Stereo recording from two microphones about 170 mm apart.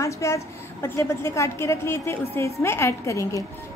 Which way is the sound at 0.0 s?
15° left (ahead or behind).